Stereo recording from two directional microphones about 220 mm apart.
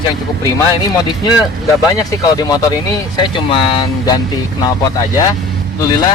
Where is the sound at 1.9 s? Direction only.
15° left (ahead or behind).